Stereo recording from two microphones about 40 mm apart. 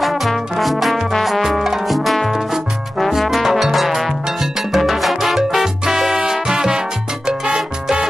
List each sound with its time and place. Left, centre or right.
0.0 s trombone: centre
1.1 s music: centre
7.5 s salsa music: centre